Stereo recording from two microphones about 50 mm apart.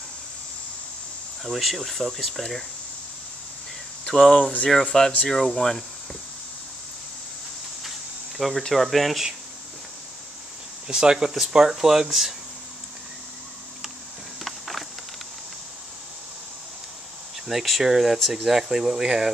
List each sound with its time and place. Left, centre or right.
1.4 s speech: centre
4.0 s speech: centre
4.4 s speech: left
4.9 s speech: centre
8.4 s speech: centre
10.9 s speech: centre
14.4 s a sound: centre
17.5 s speech: centre